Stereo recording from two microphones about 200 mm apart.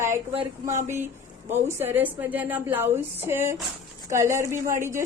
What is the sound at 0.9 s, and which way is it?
Speech, 10° right (ahead or behind).